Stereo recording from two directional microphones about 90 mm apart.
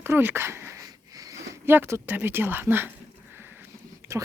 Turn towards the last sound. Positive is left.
turn(degrees=-35)  # may be behind; listen again after turning